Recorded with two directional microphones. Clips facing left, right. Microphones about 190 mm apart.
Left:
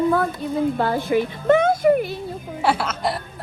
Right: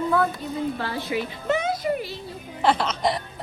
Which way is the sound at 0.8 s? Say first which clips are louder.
Left 7 dB; 50° left (ahead or behind).